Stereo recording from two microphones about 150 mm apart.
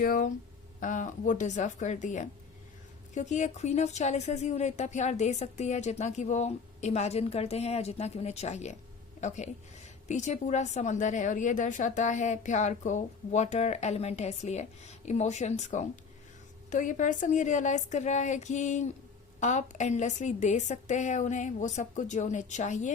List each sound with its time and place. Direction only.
0.0 s a woman's voice: 70° left (ahead or behind)